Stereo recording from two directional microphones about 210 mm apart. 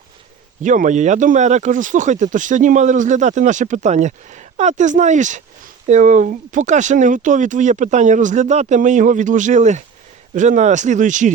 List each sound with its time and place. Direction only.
0.6 s speech: 35° right (ahead or behind)